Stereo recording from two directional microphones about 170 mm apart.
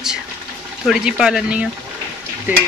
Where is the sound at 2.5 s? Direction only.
10° right (ahead or behind).